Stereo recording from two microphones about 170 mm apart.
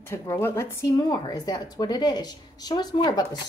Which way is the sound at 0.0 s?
15° left (ahead or behind).